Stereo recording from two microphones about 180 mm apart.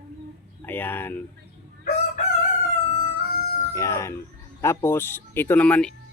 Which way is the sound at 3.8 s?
15° left (ahead or behind).